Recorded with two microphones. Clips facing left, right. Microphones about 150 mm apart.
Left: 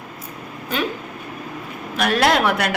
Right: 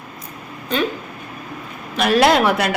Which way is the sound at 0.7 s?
5° left (ahead or behind).